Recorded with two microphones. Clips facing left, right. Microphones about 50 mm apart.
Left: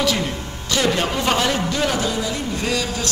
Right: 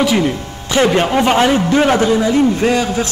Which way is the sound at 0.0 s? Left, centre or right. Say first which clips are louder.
Right 7 dB; right.